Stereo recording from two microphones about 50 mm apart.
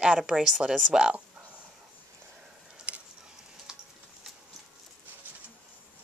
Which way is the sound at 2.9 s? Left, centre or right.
Right.